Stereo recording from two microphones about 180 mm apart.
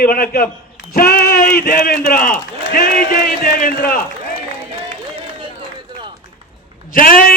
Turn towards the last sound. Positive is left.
turn(degrees=55)  # may be behind; listen again after turning